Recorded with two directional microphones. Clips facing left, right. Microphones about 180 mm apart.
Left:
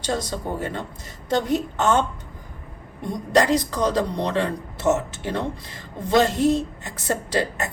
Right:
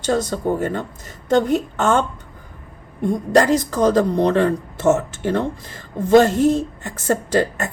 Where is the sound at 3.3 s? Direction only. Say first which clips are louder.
Right 3 dB; 45° right (ahead or behind).